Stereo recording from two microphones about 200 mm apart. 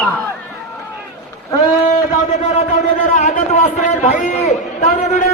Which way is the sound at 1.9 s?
40° left (ahead or behind).